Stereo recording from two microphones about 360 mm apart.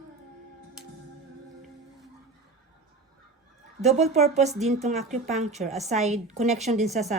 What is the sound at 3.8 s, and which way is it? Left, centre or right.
A woman's voice, centre.